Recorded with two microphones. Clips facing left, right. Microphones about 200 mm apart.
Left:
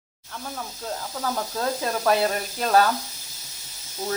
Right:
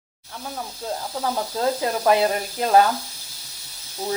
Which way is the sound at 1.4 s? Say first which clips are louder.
Right 5 dB; 20° right (ahead or behind).